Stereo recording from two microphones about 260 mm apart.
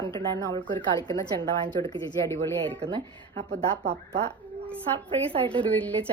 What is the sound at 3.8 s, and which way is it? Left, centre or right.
Speech, right.